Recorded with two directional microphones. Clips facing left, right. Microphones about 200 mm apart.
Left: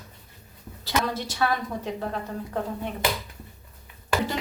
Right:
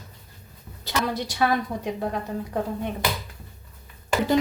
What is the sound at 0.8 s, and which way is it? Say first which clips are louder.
A woman's voice: right 1 dB; 15° right (ahead or behind).